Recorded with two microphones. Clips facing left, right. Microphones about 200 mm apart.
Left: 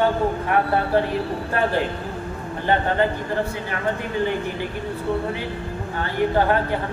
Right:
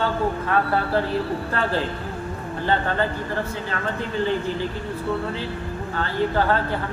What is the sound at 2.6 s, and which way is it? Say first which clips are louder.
Speech: left 3 dB; 20° left (ahead or behind).